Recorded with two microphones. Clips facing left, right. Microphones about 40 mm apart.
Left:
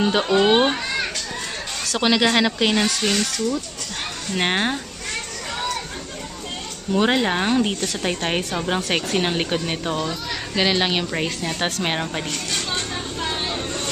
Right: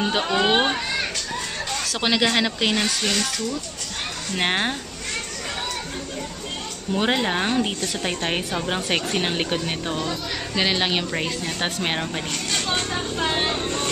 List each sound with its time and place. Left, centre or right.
0.0 s a woman's voice: centre
2.0 s a woman's voice: centre
4.4 s a woman's voice: centre
7.0 s a woman's voice: centre
12.5 s speech: centre